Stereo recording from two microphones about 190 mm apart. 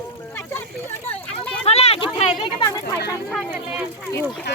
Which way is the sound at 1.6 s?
35° left (ahead or behind).